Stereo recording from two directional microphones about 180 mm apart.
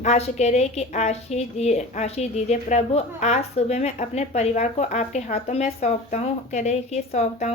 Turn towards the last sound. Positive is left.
turn(degrees=40)  # may be behind; listen again after turning